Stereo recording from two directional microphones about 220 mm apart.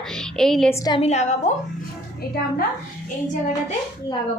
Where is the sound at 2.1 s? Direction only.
45° left (ahead or behind).